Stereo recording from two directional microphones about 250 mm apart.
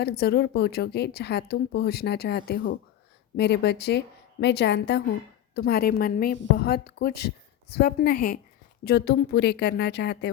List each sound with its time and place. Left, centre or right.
0.0 s a woman's voice: left